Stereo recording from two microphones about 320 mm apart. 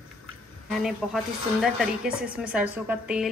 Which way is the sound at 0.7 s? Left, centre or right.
Centre.